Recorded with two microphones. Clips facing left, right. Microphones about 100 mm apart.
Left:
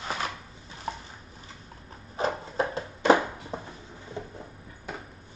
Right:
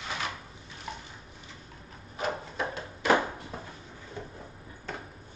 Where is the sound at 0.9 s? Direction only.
35° left (ahead or behind).